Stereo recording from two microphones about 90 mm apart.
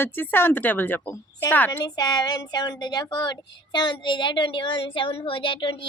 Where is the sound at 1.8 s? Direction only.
45° left (ahead or behind).